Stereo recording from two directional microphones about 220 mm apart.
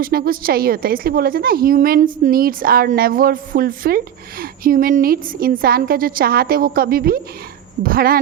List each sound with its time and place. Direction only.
0.0 s a woman's voice: 40° right (ahead or behind)